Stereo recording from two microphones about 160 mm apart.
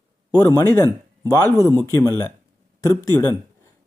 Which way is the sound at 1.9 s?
20° left (ahead or behind).